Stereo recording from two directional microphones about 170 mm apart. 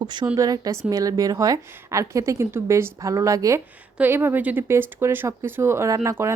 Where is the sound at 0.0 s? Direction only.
25° right (ahead or behind).